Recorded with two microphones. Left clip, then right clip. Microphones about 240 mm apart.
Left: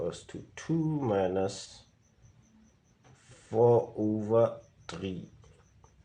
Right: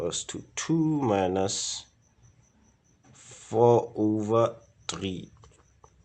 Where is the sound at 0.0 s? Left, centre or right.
Right.